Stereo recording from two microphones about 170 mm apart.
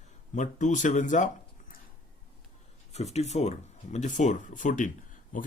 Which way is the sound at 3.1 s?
40° left (ahead or behind).